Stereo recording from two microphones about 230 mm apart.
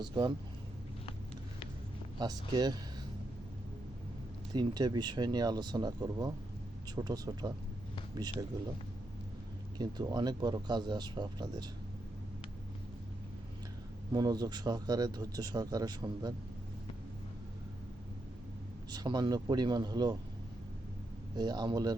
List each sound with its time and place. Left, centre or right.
0.0 s speech: centre
2.1 s speech: centre
4.5 s speech: centre
9.7 s speech: centre
14.1 s speech: centre
18.9 s speech: centre
21.3 s speech: centre